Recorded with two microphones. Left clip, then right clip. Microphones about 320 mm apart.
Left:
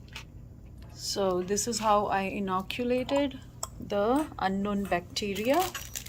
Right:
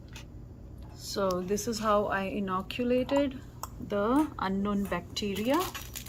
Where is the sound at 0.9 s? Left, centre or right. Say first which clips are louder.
Left 1 dB; left.